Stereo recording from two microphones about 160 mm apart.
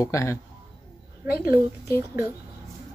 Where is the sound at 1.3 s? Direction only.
70° left (ahead or behind).